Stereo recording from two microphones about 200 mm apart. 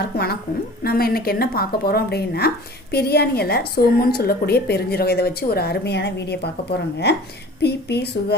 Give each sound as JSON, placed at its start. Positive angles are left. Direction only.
{"t": 0.9, "sound": "a woman's voice", "side_deg": 50}